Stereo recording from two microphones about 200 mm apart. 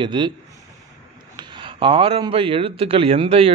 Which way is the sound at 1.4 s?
25° right (ahead or behind).